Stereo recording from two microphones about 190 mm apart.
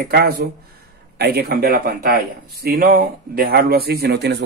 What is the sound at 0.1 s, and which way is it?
A man's voice, 55° right (ahead or behind).